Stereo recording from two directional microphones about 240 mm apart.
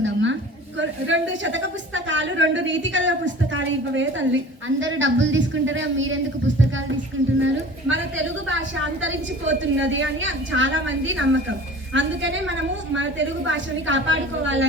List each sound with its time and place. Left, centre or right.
0.0 s a sound: right
0.8 s a woman's voice: right
7.3 s a woman's voice: right
9.0 s a woman's voice: right